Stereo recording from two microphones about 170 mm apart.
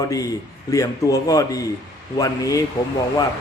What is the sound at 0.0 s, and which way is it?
A man's voice, 20° left (ahead or behind).